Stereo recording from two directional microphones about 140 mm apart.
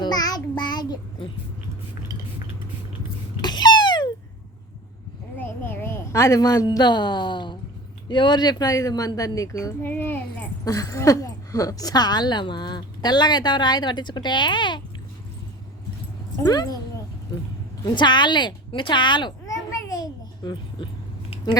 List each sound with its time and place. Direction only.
0.0 s child singing: 30° left (ahead or behind)
3.4 s a sound: 30° left (ahead or behind)
5.4 s a woman's voice: 15° left (ahead or behind)
9.8 s a child's voice: 15° left (ahead or behind)
10.7 s a woman's voice: 25° left (ahead or behind)
16.4 s speech: 30° left (ahead or behind)
17.8 s a sound: 35° left (ahead or behind)